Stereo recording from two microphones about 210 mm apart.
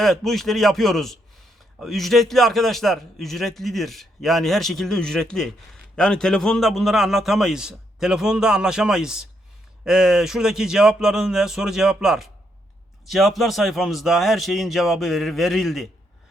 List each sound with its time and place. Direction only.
0.0 s a man's voice: centre (ahead or behind)